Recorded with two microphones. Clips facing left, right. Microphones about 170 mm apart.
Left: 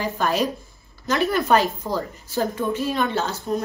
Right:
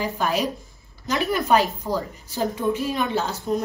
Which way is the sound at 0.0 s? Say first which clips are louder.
Left 1 dB; 10° right (ahead or behind).